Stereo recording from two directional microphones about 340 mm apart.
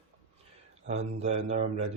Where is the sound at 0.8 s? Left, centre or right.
Centre.